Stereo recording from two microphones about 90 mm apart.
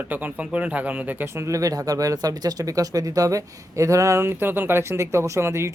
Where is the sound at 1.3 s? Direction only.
40° right (ahead or behind).